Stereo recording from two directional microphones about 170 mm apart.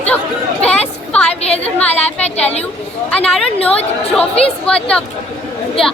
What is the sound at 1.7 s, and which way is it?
Speech, 10° left (ahead or behind).